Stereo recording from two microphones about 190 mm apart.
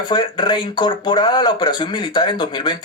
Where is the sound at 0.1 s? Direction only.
25° left (ahead or behind).